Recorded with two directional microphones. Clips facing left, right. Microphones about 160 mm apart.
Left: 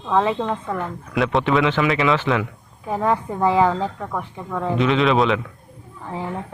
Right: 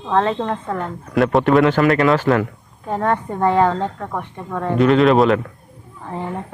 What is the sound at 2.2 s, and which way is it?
Speech, 45° right (ahead or behind).